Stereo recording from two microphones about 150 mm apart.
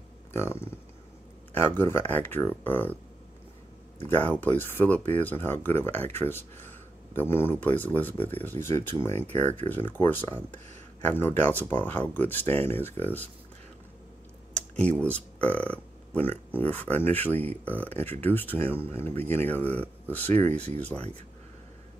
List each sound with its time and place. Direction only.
0.3 s speech: 15° left (ahead or behind)
4.0 s speech: 10° left (ahead or behind)
9.1 s speech: 50° right (ahead or behind)
9.8 s speech: 15° left (ahead or behind)
14.5 s speech: 10° left (ahead or behind)
20.5 s speech: 45° right (ahead or behind)